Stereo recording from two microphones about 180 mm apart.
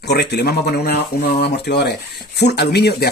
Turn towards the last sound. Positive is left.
turn(degrees=65)  # may be behind; listen again after turning